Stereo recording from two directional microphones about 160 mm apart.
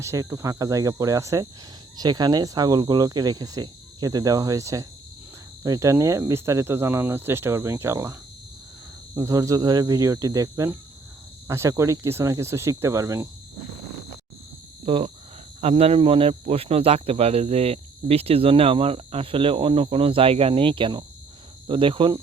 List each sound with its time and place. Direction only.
0.0 s speech: 20° right (ahead or behind)
9.1 s speech: 20° right (ahead or behind)
14.8 s speech: 35° right (ahead or behind)